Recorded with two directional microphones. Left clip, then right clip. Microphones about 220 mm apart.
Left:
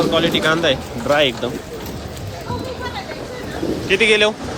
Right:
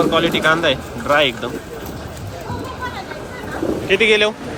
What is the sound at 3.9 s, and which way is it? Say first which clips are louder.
Speech: even; 10° left (ahead or behind).